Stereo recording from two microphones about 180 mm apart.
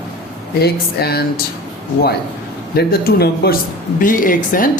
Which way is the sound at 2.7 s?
60° left (ahead or behind).